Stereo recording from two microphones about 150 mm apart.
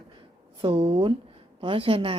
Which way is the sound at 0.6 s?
35° right (ahead or behind).